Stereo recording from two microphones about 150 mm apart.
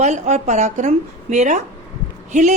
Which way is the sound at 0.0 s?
50° right (ahead or behind).